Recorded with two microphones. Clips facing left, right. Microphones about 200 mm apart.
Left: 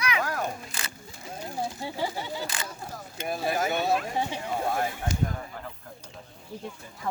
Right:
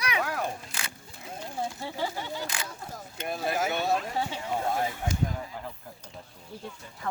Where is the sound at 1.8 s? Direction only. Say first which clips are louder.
Left 1 dB; 10° left (ahead or behind).